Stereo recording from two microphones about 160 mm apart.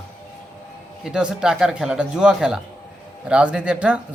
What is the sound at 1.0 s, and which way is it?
Speech, 5° right (ahead or behind).